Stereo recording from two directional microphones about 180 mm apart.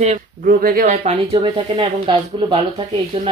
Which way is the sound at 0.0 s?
45° right (ahead or behind).